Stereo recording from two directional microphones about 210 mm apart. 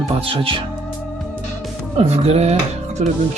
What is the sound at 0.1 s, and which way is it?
Speech, 25° right (ahead or behind).